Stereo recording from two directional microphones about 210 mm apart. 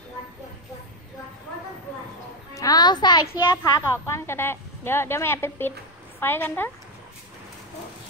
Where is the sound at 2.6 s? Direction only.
20° left (ahead or behind).